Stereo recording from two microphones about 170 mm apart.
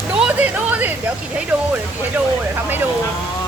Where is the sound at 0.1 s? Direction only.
5° right (ahead or behind).